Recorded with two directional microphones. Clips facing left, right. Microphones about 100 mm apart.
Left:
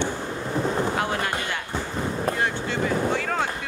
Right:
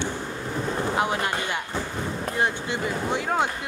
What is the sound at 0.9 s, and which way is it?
Speech, 20° right (ahead or behind).